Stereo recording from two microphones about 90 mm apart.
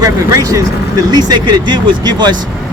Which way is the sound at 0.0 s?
40° right (ahead or behind).